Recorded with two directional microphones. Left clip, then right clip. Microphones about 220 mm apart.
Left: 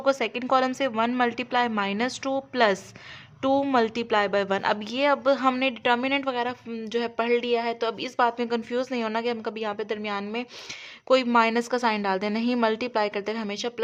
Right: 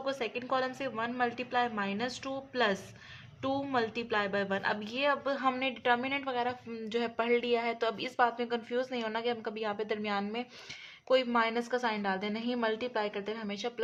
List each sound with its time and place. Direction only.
0.0 s a woman's voice: 35° left (ahead or behind)
11.1 s a woman's voice: 30° left (ahead or behind)